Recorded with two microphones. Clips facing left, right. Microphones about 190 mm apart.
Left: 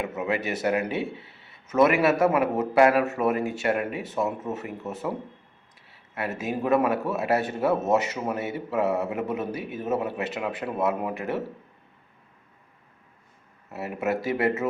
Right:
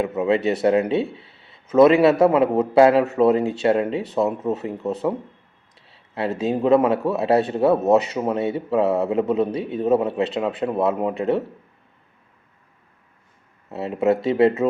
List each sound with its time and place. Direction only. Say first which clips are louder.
0.0 s a man's voice: right 8 dB; 25° right (ahead or behind)
5.9 s a sound: right 6 dB; 25° right (ahead or behind)
6.4 s a man's voice: right 6 dB; 25° right (ahead or behind)
13.7 s a man's voice: right 8 dB; 25° right (ahead or behind)